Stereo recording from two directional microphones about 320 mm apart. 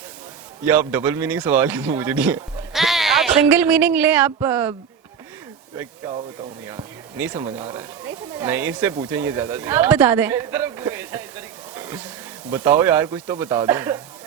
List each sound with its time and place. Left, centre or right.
0.6 s a man's voice: centre
6.7 s speech: centre
12.5 s speech: centre